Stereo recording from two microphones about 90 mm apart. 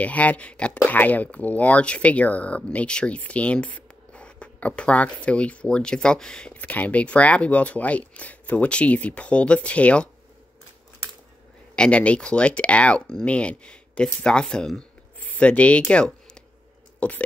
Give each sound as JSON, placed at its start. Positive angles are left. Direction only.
{"t": 0.0, "sound": "speech", "side_deg": 15}
{"t": 11.7, "sound": "speech", "side_deg": 10}
{"t": 17.0, "sound": "speech", "side_deg": 15}